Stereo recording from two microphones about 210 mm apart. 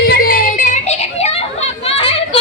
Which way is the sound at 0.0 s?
45° left (ahead or behind).